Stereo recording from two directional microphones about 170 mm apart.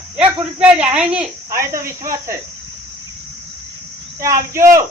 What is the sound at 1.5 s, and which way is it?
Speech, 15° right (ahead or behind).